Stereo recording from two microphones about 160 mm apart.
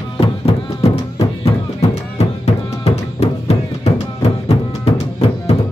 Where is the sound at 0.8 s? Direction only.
40° left (ahead or behind).